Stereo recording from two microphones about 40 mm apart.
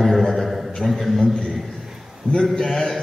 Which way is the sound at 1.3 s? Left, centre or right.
Centre.